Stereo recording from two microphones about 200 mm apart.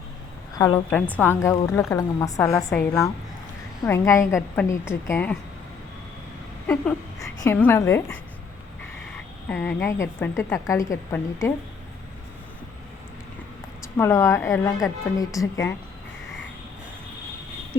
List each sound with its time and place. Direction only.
0.6 s a woman's voice: 10° left (ahead or behind)
2.7 s a woman's voice: centre (ahead or behind)
3.8 s a woman's voice: 15° left (ahead or behind)
6.7 s a woman's voice: 10° left (ahead or behind)
9.5 s a woman's voice: 10° left (ahead or behind)
13.8 s a woman's voice: 15° left (ahead or behind)